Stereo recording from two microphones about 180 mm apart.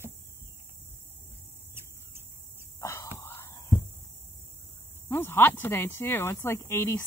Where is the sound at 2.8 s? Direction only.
15° left (ahead or behind).